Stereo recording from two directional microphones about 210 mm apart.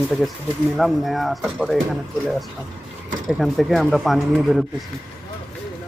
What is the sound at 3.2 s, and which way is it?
Speech, centre (ahead or behind).